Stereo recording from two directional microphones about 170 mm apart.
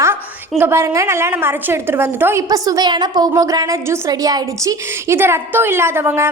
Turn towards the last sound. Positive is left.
turn(degrees=-15)  # may be behind; listen again after turning